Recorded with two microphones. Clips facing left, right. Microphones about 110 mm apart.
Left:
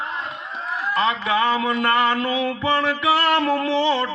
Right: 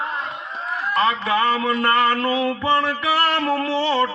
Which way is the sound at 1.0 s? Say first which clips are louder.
Right 1 dB; 20° left (ahead or behind).